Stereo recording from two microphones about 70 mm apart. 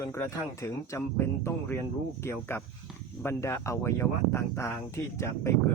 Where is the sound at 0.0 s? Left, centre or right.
Left.